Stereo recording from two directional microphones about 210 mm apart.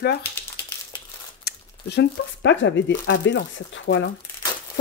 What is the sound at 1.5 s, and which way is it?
Speech, 55° left (ahead or behind).